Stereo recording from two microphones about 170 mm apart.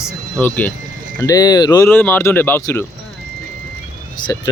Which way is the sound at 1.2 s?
20° left (ahead or behind).